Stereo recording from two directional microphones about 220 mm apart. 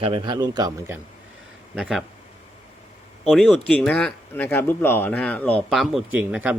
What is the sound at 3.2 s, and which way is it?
Speech, centre (ahead or behind).